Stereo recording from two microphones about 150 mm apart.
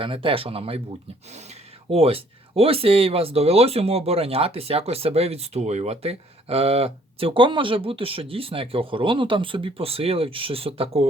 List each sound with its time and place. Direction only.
0.0 s speech: 35° right (ahead or behind)